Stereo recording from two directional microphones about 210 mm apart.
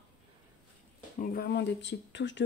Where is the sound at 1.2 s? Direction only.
45° left (ahead or behind).